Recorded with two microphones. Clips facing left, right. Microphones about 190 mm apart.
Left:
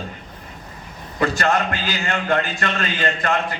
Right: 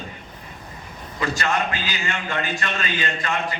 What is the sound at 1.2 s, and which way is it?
A man's voice, 55° left (ahead or behind).